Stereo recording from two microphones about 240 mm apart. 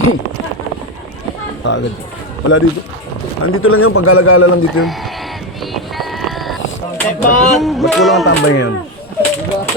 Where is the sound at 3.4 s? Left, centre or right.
Left.